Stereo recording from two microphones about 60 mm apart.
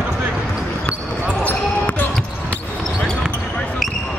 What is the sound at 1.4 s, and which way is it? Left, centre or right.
Basketball bounce, left.